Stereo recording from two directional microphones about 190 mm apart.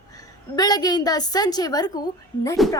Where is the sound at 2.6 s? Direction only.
Centre (ahead or behind).